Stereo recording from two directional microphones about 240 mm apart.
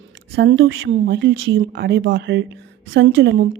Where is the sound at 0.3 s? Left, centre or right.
Right.